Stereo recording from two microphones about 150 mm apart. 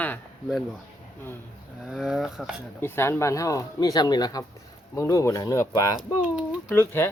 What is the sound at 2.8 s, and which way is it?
Speech, 15° left (ahead or behind).